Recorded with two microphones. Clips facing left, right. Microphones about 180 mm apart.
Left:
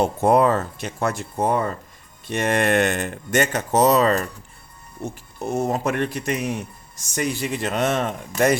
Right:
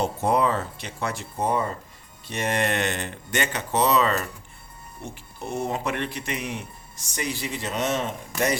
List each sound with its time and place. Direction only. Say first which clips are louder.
0.0 s a man's voice: left 5 dB; 50° left (ahead or behind)
5.5 s a man's voice: left 5 dB; 45° left (ahead or behind)